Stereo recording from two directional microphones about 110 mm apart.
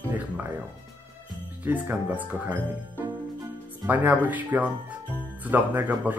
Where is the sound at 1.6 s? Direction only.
15° right (ahead or behind).